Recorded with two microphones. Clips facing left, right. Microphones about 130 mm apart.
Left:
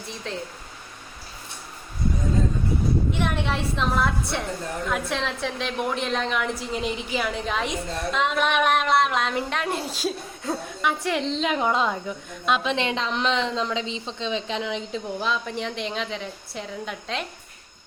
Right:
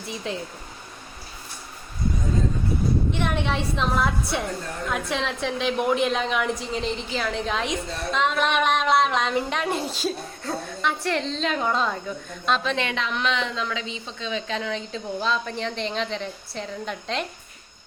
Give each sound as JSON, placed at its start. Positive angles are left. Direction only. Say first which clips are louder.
{"t": 0.3, "sound": "speech", "louder": "right 2 dB", "side_deg": -5}
{"t": 3.1, "sound": "a woman's voice", "louder": "even", "side_deg": 0}
{"t": 12.7, "sound": "a woman's voice", "louder": "left 1 dB", "side_deg": 30}